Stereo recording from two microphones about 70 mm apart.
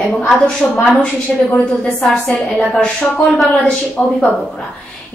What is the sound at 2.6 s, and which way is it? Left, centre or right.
A woman's voice, centre.